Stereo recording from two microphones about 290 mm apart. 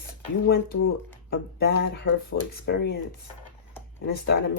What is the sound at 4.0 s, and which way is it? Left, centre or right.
Speech, left.